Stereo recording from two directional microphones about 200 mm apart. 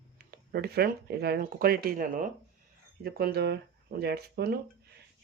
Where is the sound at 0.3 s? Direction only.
50° right (ahead or behind).